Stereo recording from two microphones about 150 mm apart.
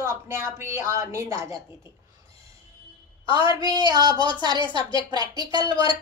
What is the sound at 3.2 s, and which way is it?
Speech, 35° left (ahead or behind).